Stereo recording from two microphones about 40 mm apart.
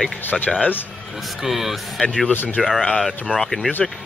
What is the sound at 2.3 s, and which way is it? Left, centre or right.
Speech, left.